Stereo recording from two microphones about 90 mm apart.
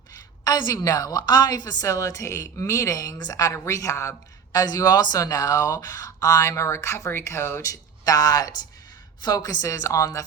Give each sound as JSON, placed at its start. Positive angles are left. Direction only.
{"t": 0.4, "sound": "a woman's voice", "side_deg": 45}
{"t": 4.5, "sound": "a woman's voice", "side_deg": 45}
{"t": 7.6, "sound": "a woman's voice", "side_deg": 40}